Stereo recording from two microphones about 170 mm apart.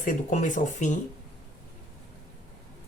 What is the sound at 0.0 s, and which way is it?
Speech, 50° left (ahead or behind).